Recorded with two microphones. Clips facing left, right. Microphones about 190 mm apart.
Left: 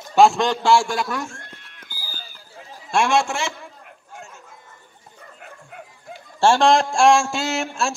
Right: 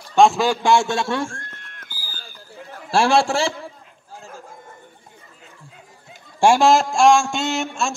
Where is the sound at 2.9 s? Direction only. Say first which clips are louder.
Right 3 dB; 35° right (ahead or behind).